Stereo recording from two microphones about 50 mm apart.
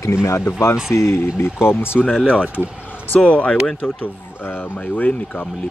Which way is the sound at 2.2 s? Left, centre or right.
Right.